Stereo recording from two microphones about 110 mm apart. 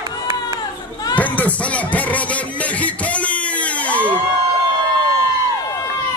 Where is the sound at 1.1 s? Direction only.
15° left (ahead or behind).